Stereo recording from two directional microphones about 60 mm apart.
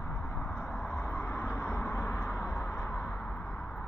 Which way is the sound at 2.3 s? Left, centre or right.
Centre.